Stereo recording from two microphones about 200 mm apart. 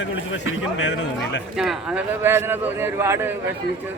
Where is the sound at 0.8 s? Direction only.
65° left (ahead or behind).